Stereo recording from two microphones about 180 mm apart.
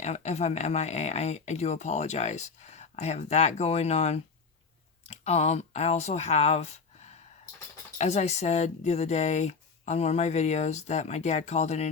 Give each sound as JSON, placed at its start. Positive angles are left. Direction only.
{"t": 0.0, "sound": "speech", "side_deg": 40}